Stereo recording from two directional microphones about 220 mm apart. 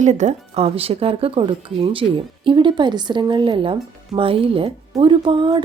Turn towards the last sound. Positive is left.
turn(degrees=-20)  # may be behind; listen again after turning